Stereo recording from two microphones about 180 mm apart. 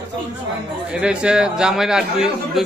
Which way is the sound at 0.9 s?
5° right (ahead or behind).